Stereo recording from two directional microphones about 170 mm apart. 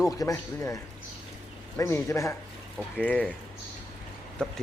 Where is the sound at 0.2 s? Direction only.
20° left (ahead or behind).